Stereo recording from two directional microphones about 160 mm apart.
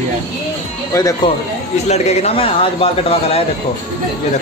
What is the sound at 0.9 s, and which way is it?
Speech, 20° left (ahead or behind).